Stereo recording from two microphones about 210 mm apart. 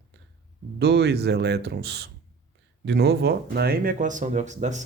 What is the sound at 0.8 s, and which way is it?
Speech, 50° right (ahead or behind).